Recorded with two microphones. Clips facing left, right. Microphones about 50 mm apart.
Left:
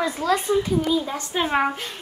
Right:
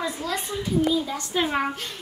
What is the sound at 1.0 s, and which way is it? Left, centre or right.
Speech, left.